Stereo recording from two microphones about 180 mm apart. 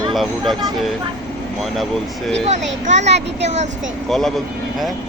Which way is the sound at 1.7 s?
Centre (ahead or behind).